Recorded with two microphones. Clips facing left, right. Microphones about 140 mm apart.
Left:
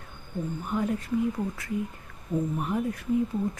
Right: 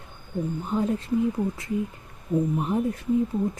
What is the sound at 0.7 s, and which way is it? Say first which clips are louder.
Speech: right 3 dB; 25° right (ahead or behind).